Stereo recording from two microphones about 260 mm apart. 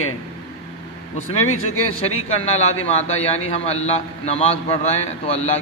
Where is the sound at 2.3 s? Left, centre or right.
Left.